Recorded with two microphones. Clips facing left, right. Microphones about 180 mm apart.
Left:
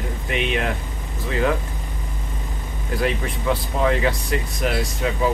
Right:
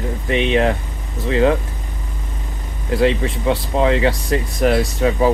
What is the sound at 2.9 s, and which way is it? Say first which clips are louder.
Speech: right 7 dB; 25° right (ahead or behind).